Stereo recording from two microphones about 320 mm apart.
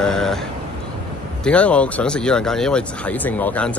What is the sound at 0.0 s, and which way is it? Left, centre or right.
Vehicle, centre.